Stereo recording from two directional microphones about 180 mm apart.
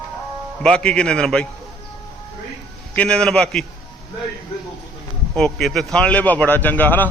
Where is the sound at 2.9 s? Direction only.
5° left (ahead or behind).